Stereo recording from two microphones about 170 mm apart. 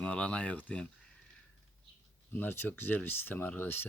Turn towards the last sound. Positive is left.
turn(degrees=10)  # may be behind; listen again after turning